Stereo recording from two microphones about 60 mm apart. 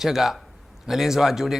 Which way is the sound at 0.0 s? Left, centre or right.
Centre.